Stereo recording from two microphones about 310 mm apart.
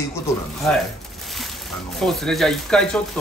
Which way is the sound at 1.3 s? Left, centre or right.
Centre.